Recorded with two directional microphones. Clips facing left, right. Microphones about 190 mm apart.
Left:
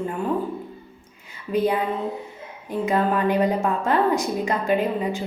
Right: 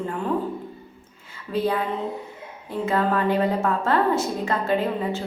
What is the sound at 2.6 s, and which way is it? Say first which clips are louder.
A woman's voice: left 1 dB; 15° left (ahead or behind).